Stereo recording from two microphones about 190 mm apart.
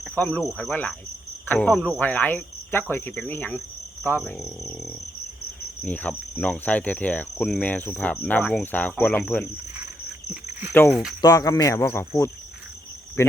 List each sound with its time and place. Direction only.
0.0 s speech: 5° left (ahead or behind)
1.5 s cricket: 10° left (ahead or behind)
4.2 s speech: centre (ahead or behind)
5.8 s cricket: 10° left (ahead or behind)
10.4 s insect: 15° right (ahead or behind)
11.2 s cricket: 20° left (ahead or behind)